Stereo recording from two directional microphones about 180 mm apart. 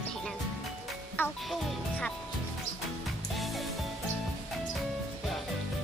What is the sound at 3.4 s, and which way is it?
Music, centre (ahead or behind).